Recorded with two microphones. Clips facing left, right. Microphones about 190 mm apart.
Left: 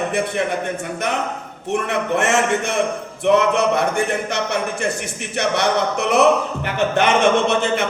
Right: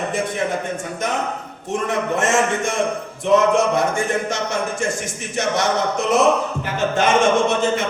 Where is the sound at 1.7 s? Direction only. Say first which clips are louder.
Left 1 dB; 65° left (ahead or behind).